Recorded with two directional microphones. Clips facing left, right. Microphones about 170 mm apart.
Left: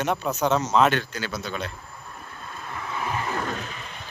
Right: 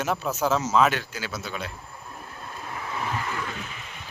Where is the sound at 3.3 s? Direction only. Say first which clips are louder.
Left 4 dB; 45° left (ahead or behind).